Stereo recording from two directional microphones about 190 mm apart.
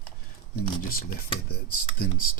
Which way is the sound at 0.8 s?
50° left (ahead or behind).